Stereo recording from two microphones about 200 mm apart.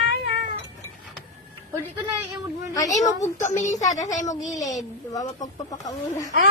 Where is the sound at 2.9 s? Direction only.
35° left (ahead or behind).